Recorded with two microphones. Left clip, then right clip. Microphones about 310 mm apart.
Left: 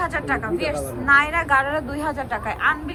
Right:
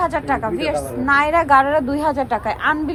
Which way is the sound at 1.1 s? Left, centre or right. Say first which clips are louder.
Right 3 dB; centre.